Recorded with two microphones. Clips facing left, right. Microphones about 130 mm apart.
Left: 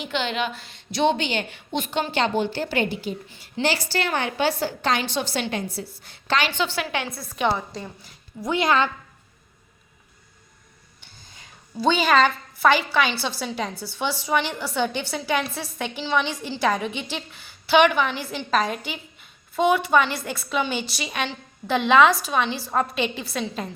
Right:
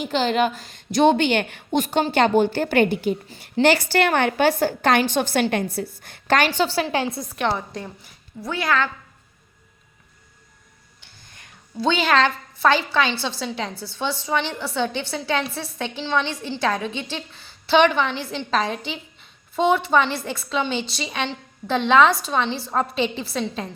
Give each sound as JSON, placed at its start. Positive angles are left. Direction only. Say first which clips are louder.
{"t": 0.0, "sound": "a woman's voice", "louder": "right 6 dB", "side_deg": -40}
{"t": 7.3, "sound": "a woman's voice", "louder": "left 2 dB", "side_deg": 5}
{"t": 8.4, "sound": "a woman's voice", "louder": "left 2 dB", "side_deg": 20}
{"t": 11.3, "sound": "a sound", "louder": "right 1 dB", "side_deg": 5}
{"t": 13.4, "sound": "a woman's voice", "louder": "even", "side_deg": 10}
{"t": 14.8, "sound": "a woman's voice", "louder": "even", "side_deg": 10}
{"t": 18.9, "sound": "a sound", "louder": "right 2 dB", "side_deg": 5}
{"t": 19.7, "sound": "a woman's voice", "louder": "right 1 dB", "side_deg": 5}
{"t": 20.7, "sound": "a woman's voice", "louder": "right 2 dB", "side_deg": -25}
{"t": 21.0, "sound": "a woman's voice", "louder": "right 1 dB", "side_deg": 5}
{"t": 22.4, "sound": "a woman's voice", "louder": "right 2 dB", "side_deg": -25}
{"t": 22.7, "sound": "a woman's voice", "louder": "right 2 dB", "side_deg": 5}